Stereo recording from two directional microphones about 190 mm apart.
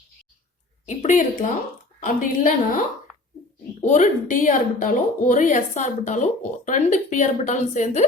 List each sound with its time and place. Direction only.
0.9 s a woman's voice: 40° left (ahead or behind)
3.8 s speech: 40° left (ahead or behind)